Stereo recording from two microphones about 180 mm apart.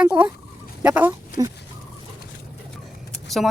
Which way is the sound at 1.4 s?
20° right (ahead or behind).